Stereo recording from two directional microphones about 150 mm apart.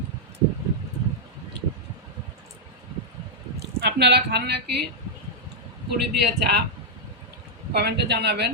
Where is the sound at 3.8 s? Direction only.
90° right.